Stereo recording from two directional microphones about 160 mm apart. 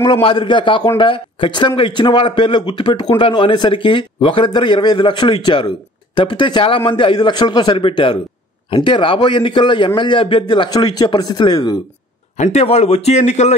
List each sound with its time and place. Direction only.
0.0 s a man's voice: 30° left (ahead or behind)
12.4 s a man's voice: 45° left (ahead or behind)